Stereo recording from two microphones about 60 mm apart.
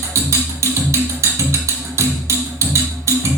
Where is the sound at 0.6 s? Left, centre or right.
Right.